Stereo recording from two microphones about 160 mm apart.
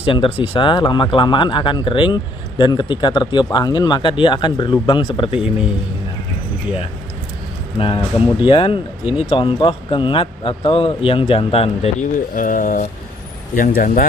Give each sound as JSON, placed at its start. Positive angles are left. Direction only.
{"t": 0.0, "sound": "a man's voice", "side_deg": 35}
{"t": 7.8, "sound": "speech", "side_deg": 35}
{"t": 12.4, "sound": "speech", "side_deg": 55}